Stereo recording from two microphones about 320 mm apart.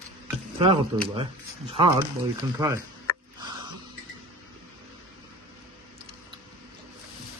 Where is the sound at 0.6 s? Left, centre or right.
Centre.